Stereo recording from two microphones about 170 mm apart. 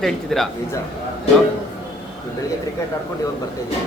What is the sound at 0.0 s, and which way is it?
Speech, centre (ahead or behind).